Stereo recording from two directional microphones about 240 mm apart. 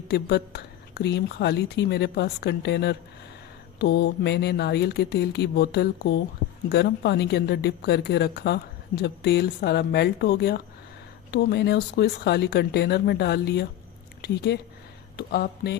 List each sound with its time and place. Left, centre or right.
0.1 s speech: left